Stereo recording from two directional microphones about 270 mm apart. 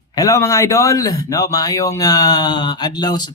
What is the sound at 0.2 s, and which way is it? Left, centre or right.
Speech, centre.